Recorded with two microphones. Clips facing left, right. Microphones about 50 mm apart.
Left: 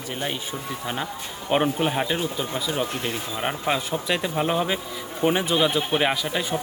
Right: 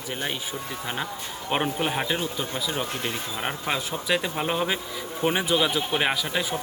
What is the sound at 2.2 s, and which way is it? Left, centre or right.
Speech, left.